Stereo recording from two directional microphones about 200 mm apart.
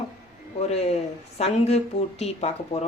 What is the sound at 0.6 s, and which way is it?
Speech, 30° left (ahead or behind).